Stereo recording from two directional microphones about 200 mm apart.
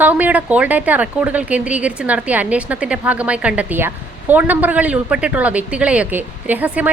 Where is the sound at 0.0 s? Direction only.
10° right (ahead or behind).